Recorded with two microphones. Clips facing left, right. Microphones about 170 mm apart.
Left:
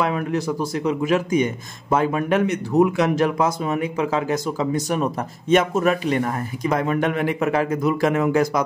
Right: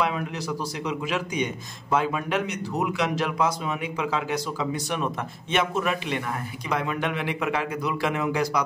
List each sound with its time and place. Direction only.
0.0 s speech: 50° left (ahead or behind)